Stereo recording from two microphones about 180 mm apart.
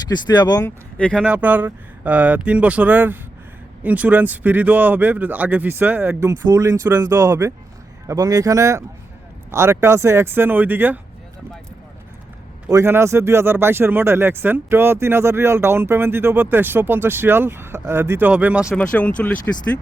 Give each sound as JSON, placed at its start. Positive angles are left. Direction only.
{"t": 0.1, "sound": "speech", "side_deg": 25}
{"t": 0.9, "sound": "speech", "side_deg": 5}
{"t": 1.2, "sound": "speech", "side_deg": -5}
{"t": 12.7, "sound": "speech", "side_deg": -15}
{"t": 18.8, "sound": "speech", "side_deg": 5}